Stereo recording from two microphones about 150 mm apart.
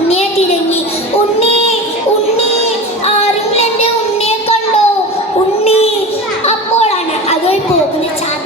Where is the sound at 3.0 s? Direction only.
40° left (ahead or behind).